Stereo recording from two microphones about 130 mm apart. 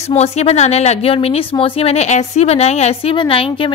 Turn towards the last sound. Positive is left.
turn(degrees=45)  # may be behind; listen again after turning